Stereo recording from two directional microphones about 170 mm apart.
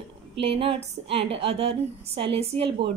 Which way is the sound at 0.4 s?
35° right (ahead or behind).